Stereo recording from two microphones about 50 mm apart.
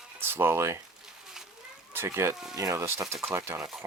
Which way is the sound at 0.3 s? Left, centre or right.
Right.